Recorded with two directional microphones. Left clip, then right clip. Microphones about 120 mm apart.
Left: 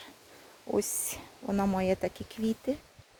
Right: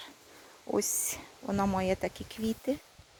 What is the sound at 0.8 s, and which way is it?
Speech, 15° left (ahead or behind).